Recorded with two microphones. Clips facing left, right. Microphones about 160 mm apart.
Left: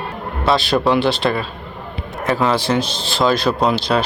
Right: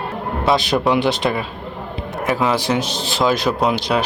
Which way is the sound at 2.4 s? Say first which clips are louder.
Left 2 dB; 15° right (ahead or behind).